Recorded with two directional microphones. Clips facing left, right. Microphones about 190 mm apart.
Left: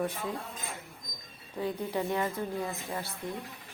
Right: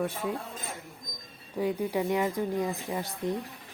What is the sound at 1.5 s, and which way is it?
Speech, 10° right (ahead or behind).